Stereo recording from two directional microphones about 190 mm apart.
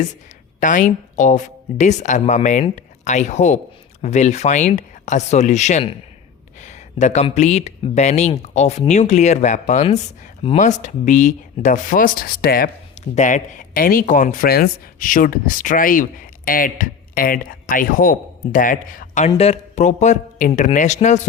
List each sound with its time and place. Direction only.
0.6 s speech: 40° left (ahead or behind)